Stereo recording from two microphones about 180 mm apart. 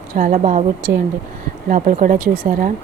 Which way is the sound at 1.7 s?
45° right (ahead or behind).